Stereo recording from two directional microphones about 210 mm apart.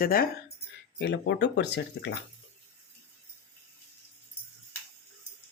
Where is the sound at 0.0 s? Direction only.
45° left (ahead or behind).